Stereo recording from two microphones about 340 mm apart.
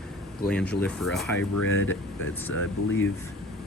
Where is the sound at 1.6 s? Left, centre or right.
Left.